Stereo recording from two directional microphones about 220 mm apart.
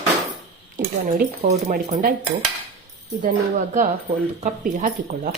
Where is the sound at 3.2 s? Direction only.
35° right (ahead or behind).